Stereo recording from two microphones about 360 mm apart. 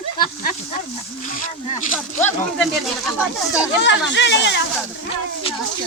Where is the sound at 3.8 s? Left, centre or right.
Left.